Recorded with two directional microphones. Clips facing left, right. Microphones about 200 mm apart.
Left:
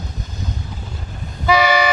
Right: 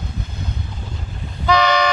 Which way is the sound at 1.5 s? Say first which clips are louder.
Left 1 dB; 5° left (ahead or behind).